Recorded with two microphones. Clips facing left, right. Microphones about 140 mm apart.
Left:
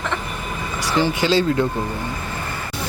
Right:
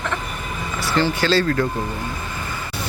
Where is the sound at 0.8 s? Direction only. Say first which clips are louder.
Left 1 dB; 15° left (ahead or behind).